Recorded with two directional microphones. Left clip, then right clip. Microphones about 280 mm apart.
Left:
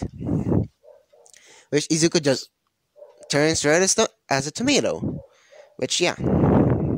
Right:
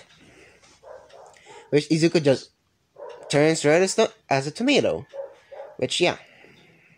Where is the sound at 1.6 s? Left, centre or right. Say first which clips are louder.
Even; left.